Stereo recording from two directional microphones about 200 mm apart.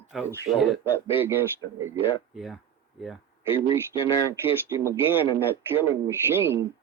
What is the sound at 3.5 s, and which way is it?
Speech, 25° left (ahead or behind).